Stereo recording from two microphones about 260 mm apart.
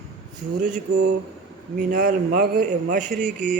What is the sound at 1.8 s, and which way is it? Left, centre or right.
A man's voice, right.